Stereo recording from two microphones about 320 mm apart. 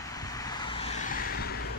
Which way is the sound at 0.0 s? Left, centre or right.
Centre.